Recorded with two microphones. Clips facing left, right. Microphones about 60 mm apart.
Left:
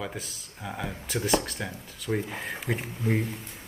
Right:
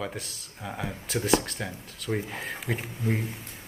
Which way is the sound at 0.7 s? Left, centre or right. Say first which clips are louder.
Even; centre.